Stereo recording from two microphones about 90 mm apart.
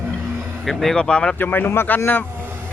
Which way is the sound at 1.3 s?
20° left (ahead or behind).